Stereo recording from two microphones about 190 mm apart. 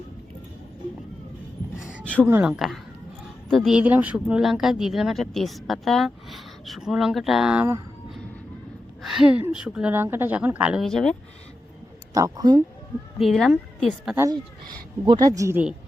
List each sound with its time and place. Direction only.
2.2 s a woman's voice: 10° right (ahead or behind)
12.1 s speech: 20° right (ahead or behind)
13.1 s a woman's voice: centre (ahead or behind)
15.0 s a woman's voice: 20° right (ahead or behind)